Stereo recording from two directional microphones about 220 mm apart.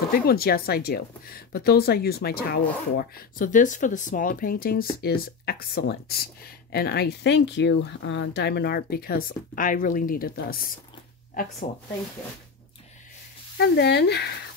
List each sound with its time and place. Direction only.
0.1 s speech: 45° left (ahead or behind)
13.6 s speech: 50° left (ahead or behind)